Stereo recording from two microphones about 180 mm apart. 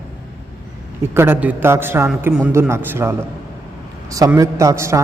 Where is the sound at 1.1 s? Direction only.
10° right (ahead or behind).